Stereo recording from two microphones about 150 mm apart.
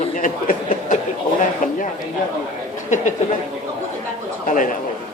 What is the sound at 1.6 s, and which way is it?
Speech, 65° left (ahead or behind).